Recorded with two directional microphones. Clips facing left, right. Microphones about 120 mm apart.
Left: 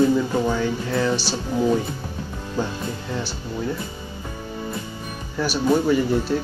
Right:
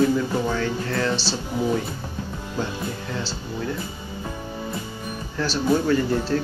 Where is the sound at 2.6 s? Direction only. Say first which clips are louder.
Left 3 dB; 15° left (ahead or behind).